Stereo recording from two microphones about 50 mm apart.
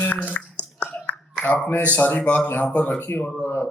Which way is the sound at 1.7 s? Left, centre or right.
Left.